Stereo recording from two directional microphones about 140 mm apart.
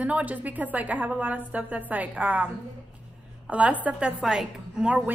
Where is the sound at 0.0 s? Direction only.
10° right (ahead or behind).